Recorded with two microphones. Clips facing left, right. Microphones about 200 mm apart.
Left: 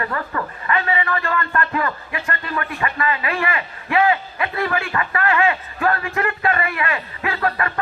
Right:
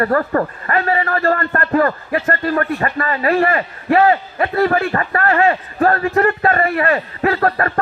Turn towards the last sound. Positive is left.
turn(degrees=-45)  # may be behind; listen again after turning